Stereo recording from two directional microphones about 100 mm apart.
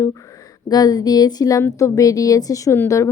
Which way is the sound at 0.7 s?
40° left (ahead or behind).